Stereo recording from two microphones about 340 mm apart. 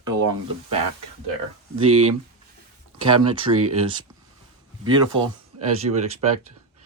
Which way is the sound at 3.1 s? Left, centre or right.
Centre.